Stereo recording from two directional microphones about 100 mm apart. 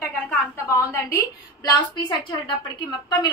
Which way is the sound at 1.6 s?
45° left (ahead or behind).